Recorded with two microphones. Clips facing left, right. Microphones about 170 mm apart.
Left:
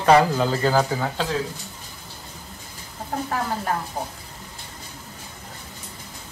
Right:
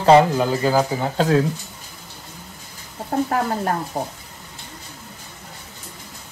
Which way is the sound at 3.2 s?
45° right (ahead or behind).